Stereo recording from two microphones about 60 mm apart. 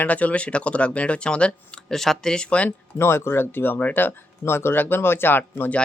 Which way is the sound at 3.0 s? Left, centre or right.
Left.